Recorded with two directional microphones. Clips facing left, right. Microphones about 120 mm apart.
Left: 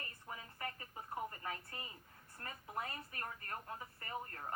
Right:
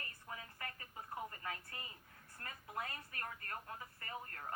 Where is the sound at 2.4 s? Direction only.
15° left (ahead or behind).